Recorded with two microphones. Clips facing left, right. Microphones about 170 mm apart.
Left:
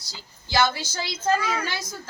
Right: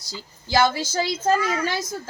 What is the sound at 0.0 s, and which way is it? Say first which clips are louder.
A woman's voice: right 7 dB; 50° right (ahead or behind).